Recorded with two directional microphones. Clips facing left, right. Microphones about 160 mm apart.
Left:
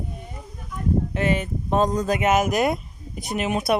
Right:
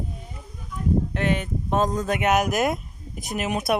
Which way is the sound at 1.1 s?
Centre (ahead or behind).